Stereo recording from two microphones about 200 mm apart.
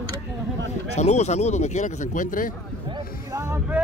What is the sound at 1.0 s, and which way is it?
Speech, 35° left (ahead or behind).